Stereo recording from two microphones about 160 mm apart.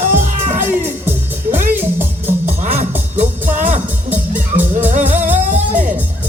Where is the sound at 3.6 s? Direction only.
50° right (ahead or behind).